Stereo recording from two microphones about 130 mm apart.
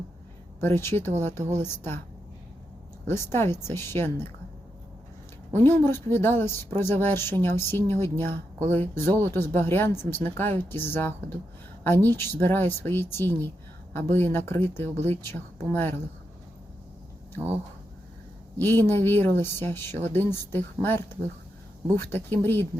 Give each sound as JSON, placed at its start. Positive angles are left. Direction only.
{"t": 0.6, "sound": "speech", "side_deg": 20}
{"t": 3.1, "sound": "speech", "side_deg": 20}
{"t": 5.5, "sound": "speech", "side_deg": 20}
{"t": 18.6, "sound": "speech", "side_deg": 15}